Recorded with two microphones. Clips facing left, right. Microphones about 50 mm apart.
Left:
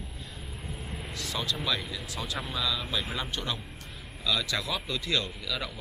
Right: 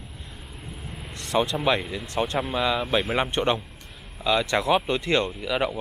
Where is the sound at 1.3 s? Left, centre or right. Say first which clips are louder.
Right 10 dB; right.